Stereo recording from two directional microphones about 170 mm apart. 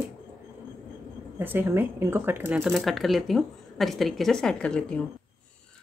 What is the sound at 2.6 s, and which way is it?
Speech, centre (ahead or behind).